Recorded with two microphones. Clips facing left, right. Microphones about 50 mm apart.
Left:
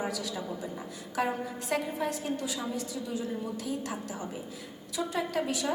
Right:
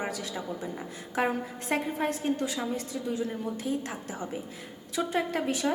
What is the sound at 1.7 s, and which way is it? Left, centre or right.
A woman's voice, right.